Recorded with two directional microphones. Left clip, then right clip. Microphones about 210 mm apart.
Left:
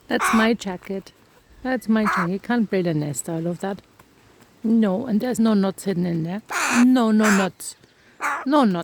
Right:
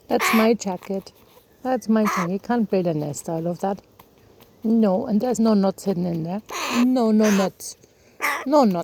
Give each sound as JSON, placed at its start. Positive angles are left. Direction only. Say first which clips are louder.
{"t": 0.2, "sound": "speech", "louder": "left 1 dB", "side_deg": -5}
{"t": 0.7, "sound": "speech", "louder": "right 2 dB", "side_deg": 15}
{"t": 2.0, "sound": "speech", "louder": "left 2 dB", "side_deg": 5}
{"t": 2.4, "sound": "speech", "louder": "right 1 dB", "side_deg": 30}
{"t": 8.2, "sound": "a sound", "louder": "right 1 dB", "side_deg": -5}
{"t": 8.4, "sound": "speech", "louder": "right 2 dB", "side_deg": 20}